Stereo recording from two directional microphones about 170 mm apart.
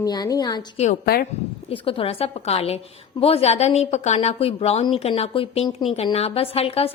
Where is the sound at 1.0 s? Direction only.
65° left (ahead or behind).